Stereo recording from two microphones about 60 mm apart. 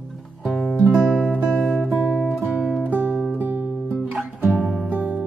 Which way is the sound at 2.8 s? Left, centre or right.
Right.